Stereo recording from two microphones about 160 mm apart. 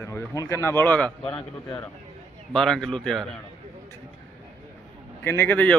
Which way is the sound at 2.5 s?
5° left (ahead or behind).